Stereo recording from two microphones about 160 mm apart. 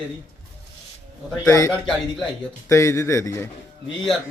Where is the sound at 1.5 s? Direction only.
15° left (ahead or behind).